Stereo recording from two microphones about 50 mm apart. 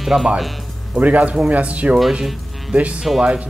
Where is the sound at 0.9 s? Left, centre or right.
Right.